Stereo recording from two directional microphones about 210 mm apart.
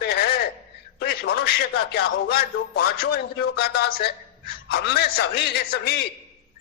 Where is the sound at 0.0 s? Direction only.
50° left (ahead or behind).